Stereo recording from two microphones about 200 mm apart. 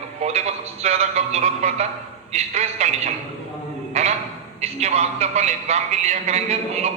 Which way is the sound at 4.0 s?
30° right (ahead or behind).